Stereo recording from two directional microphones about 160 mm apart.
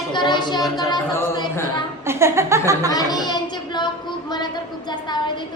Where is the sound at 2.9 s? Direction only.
25° left (ahead or behind).